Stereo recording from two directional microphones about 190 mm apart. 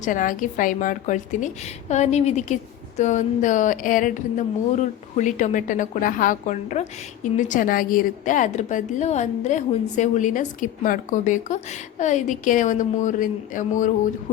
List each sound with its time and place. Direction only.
0.0 s a woman's voice: 45° left (ahead or behind)